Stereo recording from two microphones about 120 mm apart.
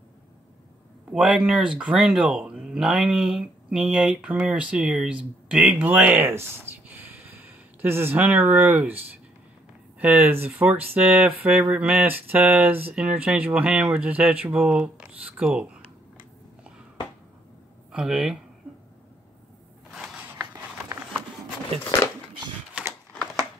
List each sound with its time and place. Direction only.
1.1 s speech: 5° right (ahead or behind)
17.9 s speech: 5° right (ahead or behind)